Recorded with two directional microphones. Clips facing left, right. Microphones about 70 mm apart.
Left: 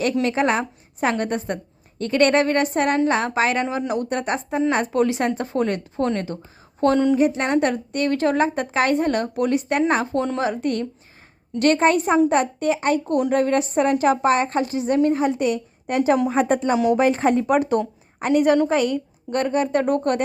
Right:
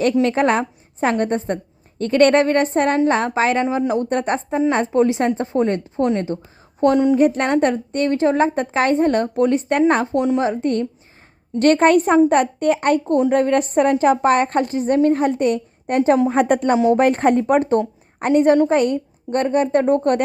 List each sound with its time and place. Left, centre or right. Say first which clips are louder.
0.0 s a woman's voice: right 4 dB; right
7.2 s a woman's voice: right 3 dB; right
10.2 s a woman's voice: right 4 dB; centre
11.6 s speech: right 4 dB; right
13.1 s a woman's voice: right 3 dB; right
16.3 s speech: right 3 dB; right
16.7 s a woman's voice: right 4 dB; right
17.0 s speech: right 3 dB; right
17.5 s speech: right 3 dB; right